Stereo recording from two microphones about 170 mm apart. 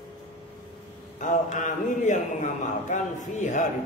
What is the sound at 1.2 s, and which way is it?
Speech, 45° left (ahead or behind).